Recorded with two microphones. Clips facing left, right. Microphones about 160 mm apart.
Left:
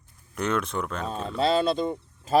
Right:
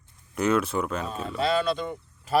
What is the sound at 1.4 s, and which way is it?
Speech, 30° left (ahead or behind).